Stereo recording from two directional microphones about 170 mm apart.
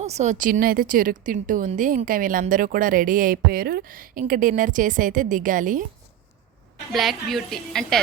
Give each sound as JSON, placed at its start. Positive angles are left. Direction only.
{"t": 0.0, "sound": "speech", "side_deg": -40}
{"t": 6.9, "sound": "a woman's voice", "side_deg": 0}